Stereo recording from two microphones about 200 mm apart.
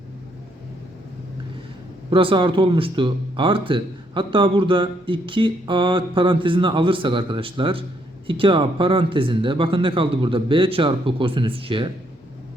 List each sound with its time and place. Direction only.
2.0 s speech: 25° right (ahead or behind)